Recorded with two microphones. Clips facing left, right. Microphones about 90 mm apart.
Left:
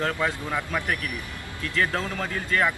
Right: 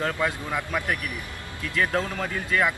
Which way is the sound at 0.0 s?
5° right (ahead or behind).